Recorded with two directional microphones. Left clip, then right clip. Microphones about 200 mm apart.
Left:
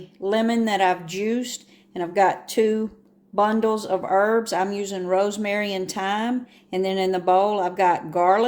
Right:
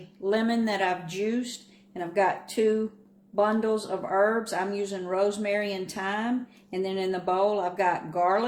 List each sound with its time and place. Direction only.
0.3 s speech: 45° left (ahead or behind)